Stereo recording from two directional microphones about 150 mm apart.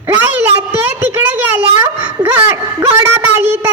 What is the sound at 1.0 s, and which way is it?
Speech, 15° right (ahead or behind).